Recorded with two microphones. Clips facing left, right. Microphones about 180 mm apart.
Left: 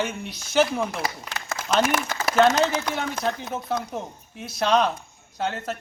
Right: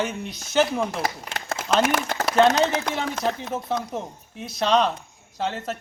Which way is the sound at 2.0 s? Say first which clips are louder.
Right 2 dB; 55° right (ahead or behind).